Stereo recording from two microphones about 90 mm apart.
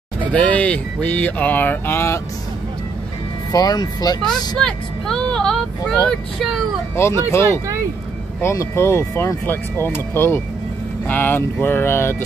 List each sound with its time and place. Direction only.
0.3 s speech: 15° left (ahead or behind)
3.5 s speech: 50° left (ahead or behind)
4.6 s speech: 5° left (ahead or behind)
7.0 s speech: 30° left (ahead or behind)